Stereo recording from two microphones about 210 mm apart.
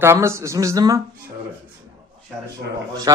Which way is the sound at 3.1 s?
15° right (ahead or behind).